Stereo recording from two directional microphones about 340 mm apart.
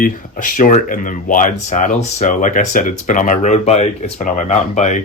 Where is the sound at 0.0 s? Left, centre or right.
Left.